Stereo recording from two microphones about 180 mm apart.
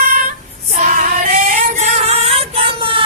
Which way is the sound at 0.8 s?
45° right (ahead or behind).